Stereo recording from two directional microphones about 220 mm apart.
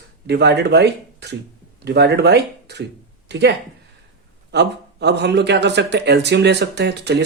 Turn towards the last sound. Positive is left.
turn(degrees=-50)  # may be behind; listen again after turning